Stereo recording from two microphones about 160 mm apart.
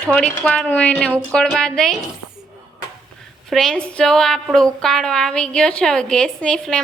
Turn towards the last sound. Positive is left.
turn(degrees=5)  # may be behind; listen again after turning